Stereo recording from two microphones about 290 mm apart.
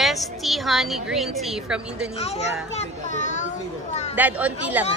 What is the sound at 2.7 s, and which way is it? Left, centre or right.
Children playing, left.